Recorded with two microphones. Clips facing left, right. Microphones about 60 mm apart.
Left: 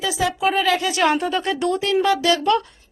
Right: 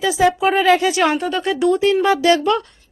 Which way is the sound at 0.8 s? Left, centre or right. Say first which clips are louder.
Right 2 dB; centre.